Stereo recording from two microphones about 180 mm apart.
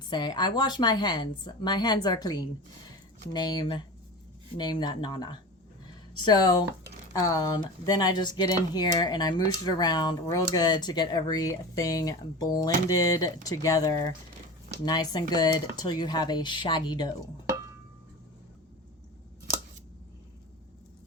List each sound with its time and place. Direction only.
0.1 s speech: 25° left (ahead or behind)